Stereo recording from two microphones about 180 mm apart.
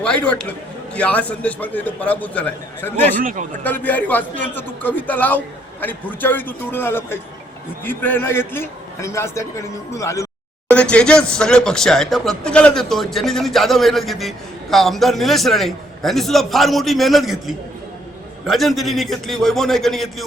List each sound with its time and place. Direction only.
0.0 s a man's voice: 5° left (ahead or behind)
3.2 s a man's voice: 50° right (ahead or behind)
3.6 s a man's voice: 10° left (ahead or behind)
10.7 s speech: 5° left (ahead or behind)